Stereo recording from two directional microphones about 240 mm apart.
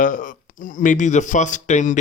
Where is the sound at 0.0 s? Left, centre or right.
Left.